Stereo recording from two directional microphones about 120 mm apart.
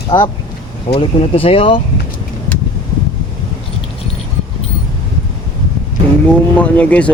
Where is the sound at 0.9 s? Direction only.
55° left (ahead or behind).